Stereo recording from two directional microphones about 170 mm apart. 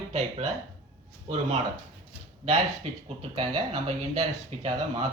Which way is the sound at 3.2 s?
35° right (ahead or behind).